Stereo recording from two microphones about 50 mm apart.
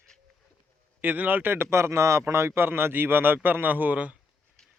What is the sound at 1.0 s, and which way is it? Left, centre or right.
Speech, right.